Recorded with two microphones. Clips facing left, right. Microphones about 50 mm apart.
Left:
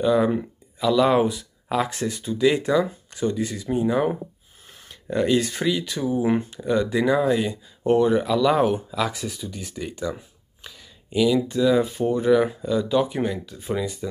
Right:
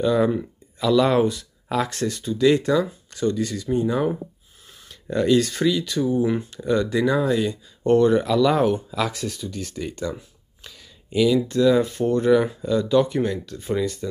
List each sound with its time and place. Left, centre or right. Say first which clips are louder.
0.0 s speech: even; centre
6.2 s speech: left 1 dB; left
6.5 s speech: right 1 dB; centre